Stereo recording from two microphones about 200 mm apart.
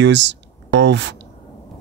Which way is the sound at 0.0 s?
65° right (ahead or behind).